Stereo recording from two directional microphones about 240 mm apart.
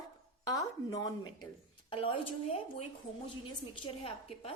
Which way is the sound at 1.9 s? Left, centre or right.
Left.